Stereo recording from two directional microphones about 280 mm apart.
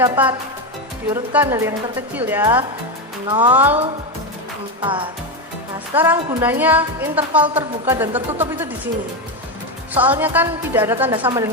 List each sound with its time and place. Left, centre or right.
0.0 s a woman's voice: centre
3.2 s a woman's voice: centre
3.5 s a woman's voice: centre
4.8 s a woman's voice: centre
5.9 s a woman's voice: centre
9.9 s a woman's voice: centre